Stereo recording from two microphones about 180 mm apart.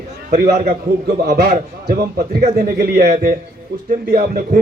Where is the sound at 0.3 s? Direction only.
60° right (ahead or behind).